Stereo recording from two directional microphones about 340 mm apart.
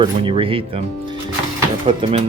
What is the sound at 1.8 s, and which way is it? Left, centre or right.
Speech, centre.